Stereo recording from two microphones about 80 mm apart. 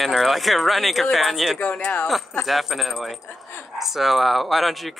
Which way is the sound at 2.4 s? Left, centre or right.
Centre.